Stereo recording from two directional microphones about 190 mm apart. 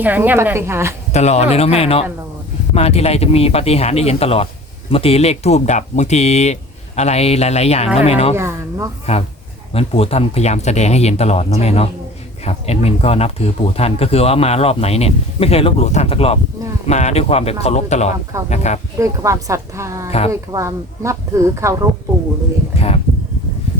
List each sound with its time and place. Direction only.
0.0 s speech: 10° right (ahead or behind)
1.1 s speech: 35° left (ahead or behind)
8.4 s speech: 15° right (ahead or behind)
9.1 s speech: 35° left (ahead or behind)
18.9 s speech: 15° right (ahead or behind)
20.1 s speech: 30° left (ahead or behind)
20.3 s speech: 15° right (ahead or behind)
22.7 s speech: 30° left (ahead or behind)